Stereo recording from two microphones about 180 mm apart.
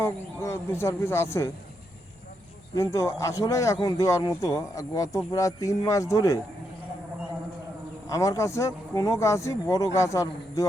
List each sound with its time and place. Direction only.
0.0 s speech: 15° left (ahead or behind)
2.7 s speech: 15° left (ahead or behind)
8.0 s speech: 20° left (ahead or behind)